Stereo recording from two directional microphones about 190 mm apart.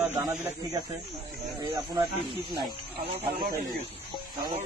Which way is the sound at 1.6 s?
25° right (ahead or behind).